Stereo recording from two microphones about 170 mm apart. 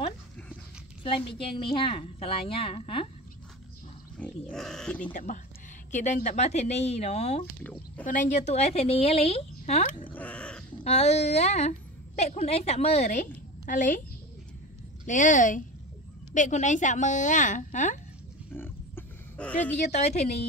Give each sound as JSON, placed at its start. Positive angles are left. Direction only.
{"t": 1.0, "sound": "a woman's voice", "side_deg": 30}
{"t": 4.2, "sound": "speech", "side_deg": 5}
{"t": 5.1, "sound": "a woman's voice", "side_deg": 50}
{"t": 10.0, "sound": "a sound", "side_deg": 10}
{"t": 10.8, "sound": "a woman's voice", "side_deg": 40}
{"t": 15.0, "sound": "a woman's voice", "side_deg": 45}
{"t": 18.5, "sound": "roaring cats", "side_deg": 10}
{"t": 19.8, "sound": "a woman's voice", "side_deg": 40}